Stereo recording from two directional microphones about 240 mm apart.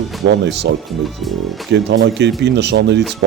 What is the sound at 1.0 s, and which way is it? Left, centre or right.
Speech, centre.